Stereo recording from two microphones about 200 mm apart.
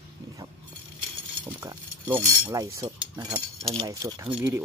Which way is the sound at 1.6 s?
10° right (ahead or behind).